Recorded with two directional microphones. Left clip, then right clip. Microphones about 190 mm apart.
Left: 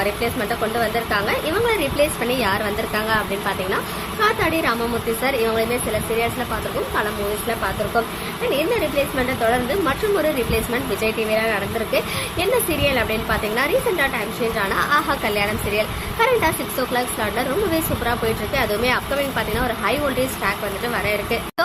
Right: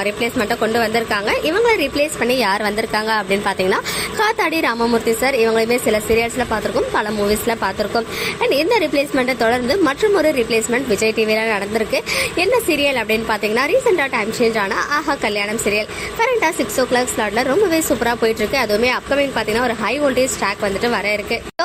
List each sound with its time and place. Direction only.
0.0 s speech: 30° right (ahead or behind)
8.5 s speech: 30° right (ahead or behind)